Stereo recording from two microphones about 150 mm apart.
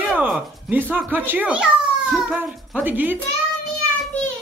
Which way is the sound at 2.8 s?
10° right (ahead or behind).